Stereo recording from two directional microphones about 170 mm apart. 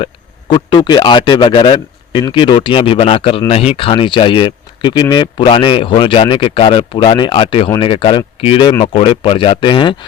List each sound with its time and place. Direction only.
0.0 s speech: 25° left (ahead or behind)